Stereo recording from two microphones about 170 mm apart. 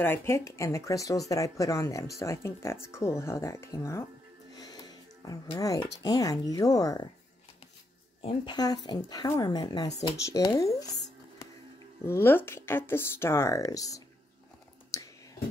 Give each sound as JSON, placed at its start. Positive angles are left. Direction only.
{"t": 0.0, "sound": "speech", "side_deg": 15}
{"t": 4.6, "sound": "music", "side_deg": 20}
{"t": 6.0, "sound": "speech", "side_deg": 20}
{"t": 8.2, "sound": "speech", "side_deg": 30}
{"t": 12.0, "sound": "speech", "side_deg": 15}
{"t": 14.9, "sound": "whispering", "side_deg": 20}